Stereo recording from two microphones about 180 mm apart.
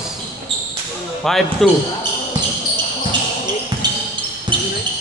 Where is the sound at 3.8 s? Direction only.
25° right (ahead or behind).